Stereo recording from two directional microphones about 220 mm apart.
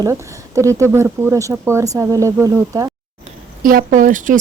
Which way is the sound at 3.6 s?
40° right (ahead or behind).